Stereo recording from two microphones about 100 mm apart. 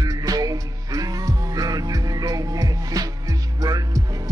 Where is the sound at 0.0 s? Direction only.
40° right (ahead or behind).